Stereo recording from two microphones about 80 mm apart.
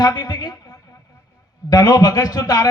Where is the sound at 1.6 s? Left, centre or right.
Left.